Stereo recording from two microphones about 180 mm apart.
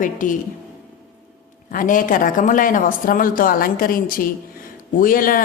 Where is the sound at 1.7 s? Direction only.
50° left (ahead or behind).